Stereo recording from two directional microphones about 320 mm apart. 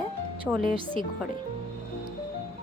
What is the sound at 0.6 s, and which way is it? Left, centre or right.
Speech, left.